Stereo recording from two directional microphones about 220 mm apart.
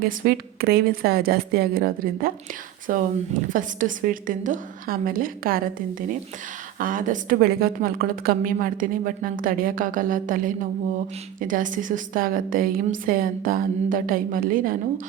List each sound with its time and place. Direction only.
0.0 s a woman's voice: 40° right (ahead or behind)